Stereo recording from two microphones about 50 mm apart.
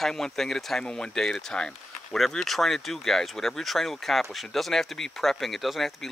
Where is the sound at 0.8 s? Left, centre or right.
Centre.